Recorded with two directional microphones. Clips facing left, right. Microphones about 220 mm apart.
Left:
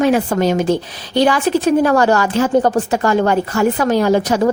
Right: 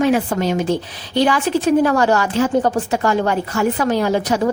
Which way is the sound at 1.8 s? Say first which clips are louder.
Left 2 dB; 45° left (ahead or behind).